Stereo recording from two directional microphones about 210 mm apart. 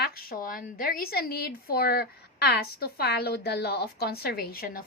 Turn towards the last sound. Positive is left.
turn(degrees=45)  # may be behind; listen again after turning